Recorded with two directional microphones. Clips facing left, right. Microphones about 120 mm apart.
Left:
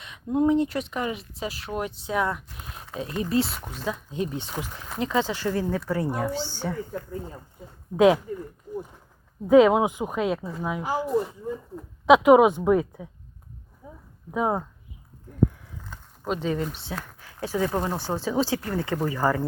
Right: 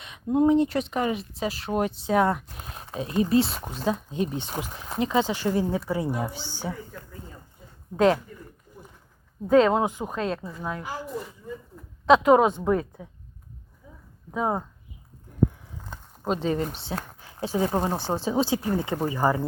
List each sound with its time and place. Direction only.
0.0 s speech: 20° right (ahead or behind)
7.9 s speech: 5° left (ahead or behind)
9.5 s speech: 10° left (ahead or behind)
12.0 s speech: 10° left (ahead or behind)
13.8 s a sound: 50° left (ahead or behind)
14.3 s speech: 5° left (ahead or behind)
15.9 s speech: 35° right (ahead or behind); by 19.5 s 15° right (ahead or behind)